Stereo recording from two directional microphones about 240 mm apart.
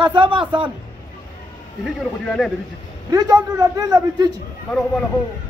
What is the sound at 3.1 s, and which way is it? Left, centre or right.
A man's voice, centre.